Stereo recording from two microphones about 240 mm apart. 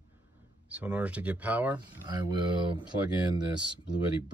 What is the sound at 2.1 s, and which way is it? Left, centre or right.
Speech, centre.